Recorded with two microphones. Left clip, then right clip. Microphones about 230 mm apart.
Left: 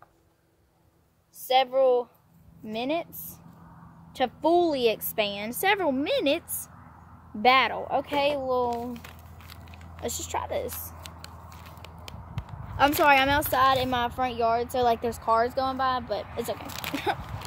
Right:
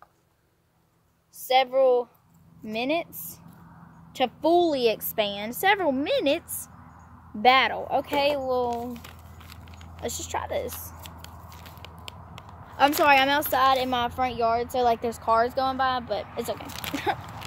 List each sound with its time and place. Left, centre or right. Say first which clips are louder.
1.5 s a woman's voice: right 1 dB; centre